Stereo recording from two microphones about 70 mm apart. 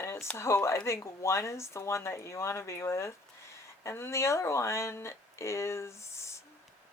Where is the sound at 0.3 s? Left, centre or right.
Left.